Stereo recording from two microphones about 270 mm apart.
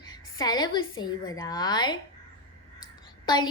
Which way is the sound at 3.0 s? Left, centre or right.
Centre.